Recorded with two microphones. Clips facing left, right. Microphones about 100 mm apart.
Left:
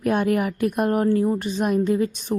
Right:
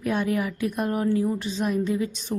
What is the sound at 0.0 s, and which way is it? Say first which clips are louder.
A woman's voice: left 4 dB; 55° left (ahead or behind).